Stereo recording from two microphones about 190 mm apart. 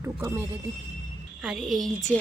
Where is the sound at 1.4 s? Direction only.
Centre (ahead or behind).